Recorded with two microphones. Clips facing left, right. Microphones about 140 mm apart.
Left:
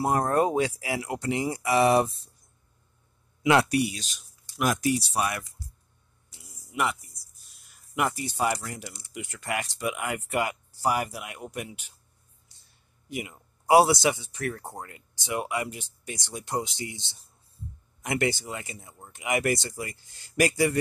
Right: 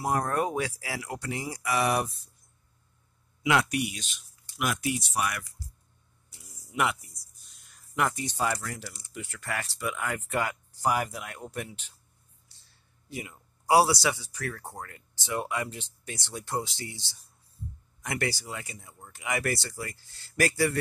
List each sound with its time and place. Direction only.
0.0 s speech: 30° left (ahead or behind)
3.4 s speech: 35° left (ahead or behind)
6.7 s a sound: centre (ahead or behind)
8.5 s speech: 20° left (ahead or behind)
12.5 s a sound: 15° left (ahead or behind)
13.1 s speech: 20° left (ahead or behind)